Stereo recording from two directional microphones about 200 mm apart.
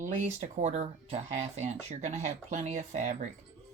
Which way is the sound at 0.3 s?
35° right (ahead or behind).